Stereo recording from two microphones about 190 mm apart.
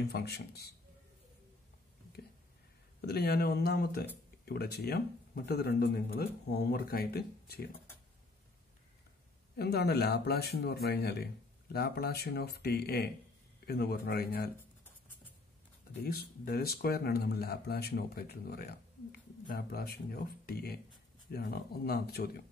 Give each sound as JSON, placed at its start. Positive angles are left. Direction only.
{"t": 0.1, "sound": "speech", "side_deg": 60}
{"t": 3.0, "sound": "speech", "side_deg": 55}
{"t": 9.6, "sound": "speech", "side_deg": 60}
{"t": 16.0, "sound": "speech", "side_deg": 55}